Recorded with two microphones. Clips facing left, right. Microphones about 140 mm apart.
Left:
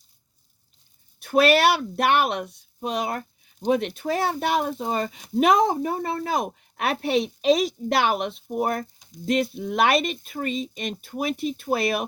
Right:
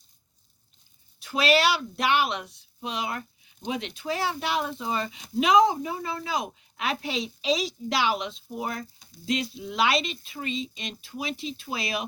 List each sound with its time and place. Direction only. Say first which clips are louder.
1.2 s speech: left 5 dB; 55° left (ahead or behind)